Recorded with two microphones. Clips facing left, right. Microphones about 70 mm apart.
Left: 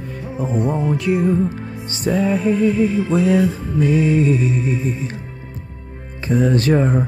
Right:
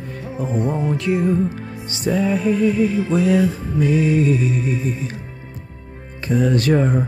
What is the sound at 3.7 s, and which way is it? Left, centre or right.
Mantra, left.